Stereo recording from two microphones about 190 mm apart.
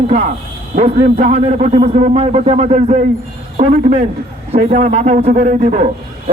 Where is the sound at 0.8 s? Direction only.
35° right (ahead or behind).